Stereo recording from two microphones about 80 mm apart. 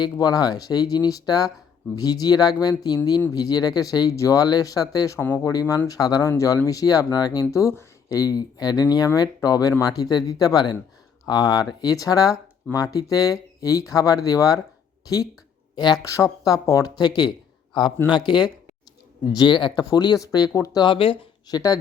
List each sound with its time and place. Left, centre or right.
0.0 s speech: left
4.1 s speech: left
7.5 s speech: left
8.2 s speech: left
15.7 s speech: left
16.0 s speech: left
17.0 s speech: left
19.8 s speech: left
20.5 s speech: left
20.8 s speech: left
21.4 s speech: left